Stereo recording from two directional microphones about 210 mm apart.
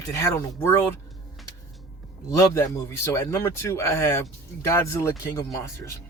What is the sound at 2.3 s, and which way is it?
A man's voice, 15° left (ahead or behind).